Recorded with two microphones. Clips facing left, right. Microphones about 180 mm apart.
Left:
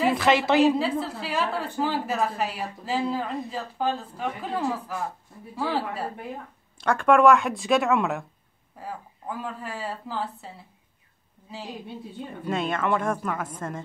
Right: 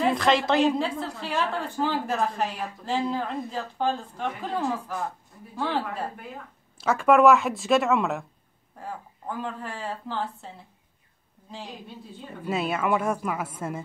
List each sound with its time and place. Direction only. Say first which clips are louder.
0.0 s a woman's voice: left 1 dB; 5° left (ahead or behind)
12.4 s speech: even; 5° right (ahead or behind)